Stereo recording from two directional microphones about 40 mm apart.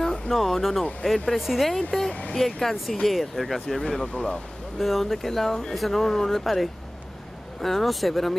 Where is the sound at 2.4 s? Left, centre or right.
Centre.